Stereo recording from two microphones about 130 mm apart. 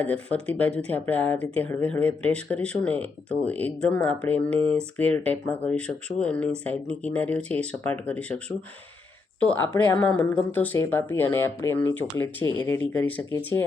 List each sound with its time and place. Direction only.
0.0 s speech: 10° left (ahead or behind)